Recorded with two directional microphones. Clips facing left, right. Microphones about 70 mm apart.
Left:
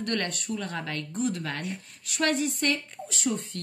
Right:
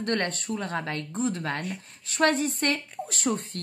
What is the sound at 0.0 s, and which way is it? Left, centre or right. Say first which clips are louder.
Speech: right 2 dB; right.